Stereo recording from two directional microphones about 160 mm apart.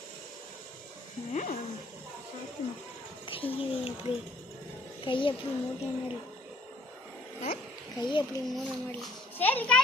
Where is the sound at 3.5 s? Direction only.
35° left (ahead or behind).